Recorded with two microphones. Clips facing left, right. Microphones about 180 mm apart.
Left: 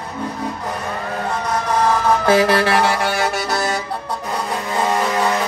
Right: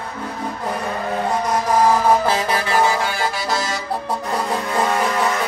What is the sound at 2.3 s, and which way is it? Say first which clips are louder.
Music: left 6 dB; 70° left (ahead or behind).